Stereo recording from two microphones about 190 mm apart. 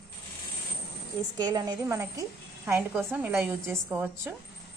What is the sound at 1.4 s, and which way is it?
A woman's voice, 20° right (ahead or behind).